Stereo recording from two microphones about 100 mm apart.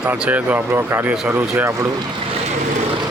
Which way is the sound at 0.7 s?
25° right (ahead or behind).